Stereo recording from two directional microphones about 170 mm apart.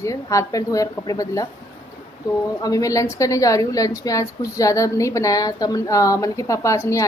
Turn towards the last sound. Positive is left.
turn(degrees=20)  # may be behind; listen again after turning